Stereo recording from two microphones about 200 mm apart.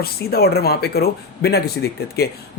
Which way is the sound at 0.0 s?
50° left (ahead or behind).